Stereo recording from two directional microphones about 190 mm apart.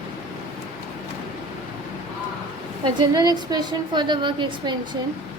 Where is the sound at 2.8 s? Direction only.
20° right (ahead or behind).